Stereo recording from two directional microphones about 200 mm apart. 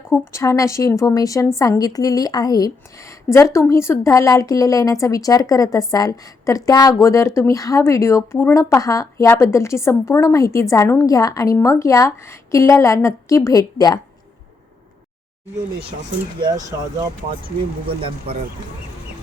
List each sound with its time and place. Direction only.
0.1 s a woman's voice: 15° left (ahead or behind)
16.4 s speech: 20° right (ahead or behind)
17.8 s speech: 30° right (ahead or behind)